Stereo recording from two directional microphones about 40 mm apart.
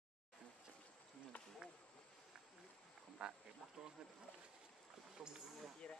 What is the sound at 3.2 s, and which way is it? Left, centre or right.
Speech, right.